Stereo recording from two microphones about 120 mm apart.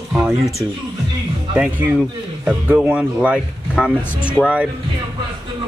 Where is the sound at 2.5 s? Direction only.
10° right (ahead or behind).